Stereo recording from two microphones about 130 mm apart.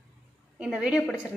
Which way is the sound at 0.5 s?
5° right (ahead or behind).